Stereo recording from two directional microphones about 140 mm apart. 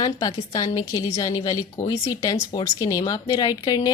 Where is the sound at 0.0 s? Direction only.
25° left (ahead or behind).